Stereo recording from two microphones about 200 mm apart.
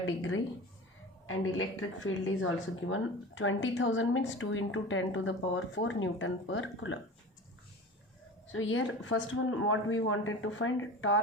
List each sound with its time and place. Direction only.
0.0 s speech: 75° left (ahead or behind)
2.0 s speech: 80° left
8.5 s speech: 80° left